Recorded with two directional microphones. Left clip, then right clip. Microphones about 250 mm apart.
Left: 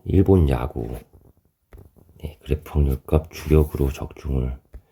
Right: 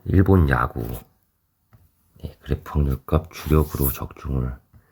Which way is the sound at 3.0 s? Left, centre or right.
Centre.